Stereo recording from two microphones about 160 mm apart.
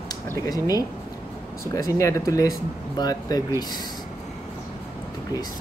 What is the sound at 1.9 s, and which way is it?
Speech, 20° left (ahead or behind).